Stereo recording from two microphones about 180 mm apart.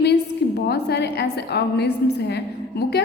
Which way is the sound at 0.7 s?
65° left (ahead or behind).